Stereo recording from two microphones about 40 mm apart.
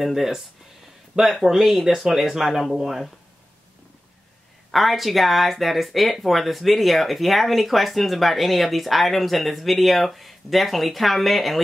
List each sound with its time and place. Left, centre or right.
0.0 s speech: centre
1.4 s speech: centre
4.6 s speech: centre